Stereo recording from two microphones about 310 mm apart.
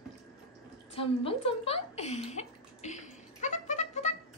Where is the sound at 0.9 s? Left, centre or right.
Centre.